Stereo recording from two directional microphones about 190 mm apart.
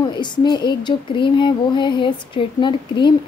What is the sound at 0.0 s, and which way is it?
Speech, 25° left (ahead or behind).